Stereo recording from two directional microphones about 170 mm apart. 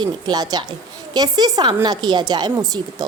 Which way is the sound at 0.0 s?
25° right (ahead or behind).